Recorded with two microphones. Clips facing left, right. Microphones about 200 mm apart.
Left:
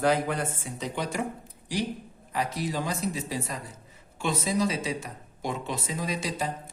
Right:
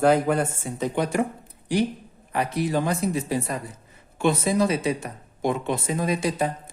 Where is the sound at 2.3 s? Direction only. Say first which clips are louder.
Right 6 dB; 60° right (ahead or behind).